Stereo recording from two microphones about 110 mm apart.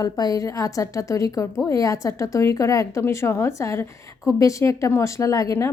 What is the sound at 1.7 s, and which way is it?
Speech, 30° left (ahead or behind).